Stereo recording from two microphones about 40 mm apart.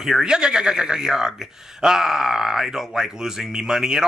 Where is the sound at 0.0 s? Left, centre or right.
Centre.